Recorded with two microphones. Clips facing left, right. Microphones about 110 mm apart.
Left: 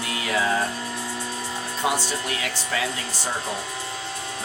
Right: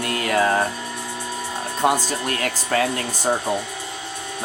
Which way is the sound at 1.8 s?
45° right (ahead or behind).